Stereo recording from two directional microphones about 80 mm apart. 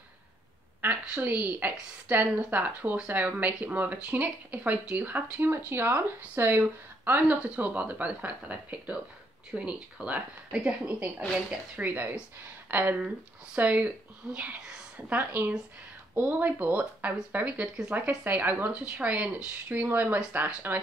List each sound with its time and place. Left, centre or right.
1.2 s speech: centre
7.1 s speech: centre